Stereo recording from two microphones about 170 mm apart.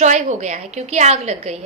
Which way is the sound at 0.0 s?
45° right (ahead or behind).